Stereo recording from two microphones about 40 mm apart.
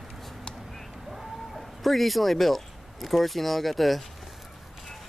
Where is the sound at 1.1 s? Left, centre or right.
Centre.